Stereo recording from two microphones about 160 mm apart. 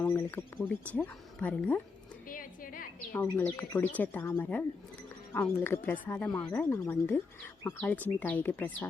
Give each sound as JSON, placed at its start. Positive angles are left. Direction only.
{"t": 0.0, "sound": "speech", "side_deg": 10}
{"t": 2.2, "sound": "a sound", "side_deg": 60}
{"t": 3.1, "sound": "speech", "side_deg": 10}